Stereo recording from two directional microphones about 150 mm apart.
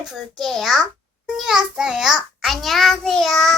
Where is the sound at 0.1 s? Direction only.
Centre (ahead or behind).